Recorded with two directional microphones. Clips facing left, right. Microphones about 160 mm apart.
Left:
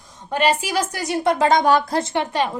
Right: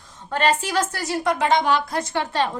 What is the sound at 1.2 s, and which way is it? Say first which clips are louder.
Speech: left 4 dB; 30° left (ahead or behind).